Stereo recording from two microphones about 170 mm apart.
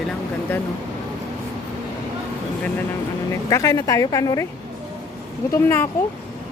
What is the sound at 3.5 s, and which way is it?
Speech, 20° left (ahead or behind).